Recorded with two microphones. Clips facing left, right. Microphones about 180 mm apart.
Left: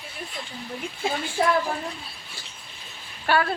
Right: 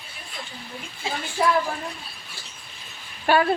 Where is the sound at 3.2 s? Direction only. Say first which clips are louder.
Right 3 dB; 15° right (ahead or behind).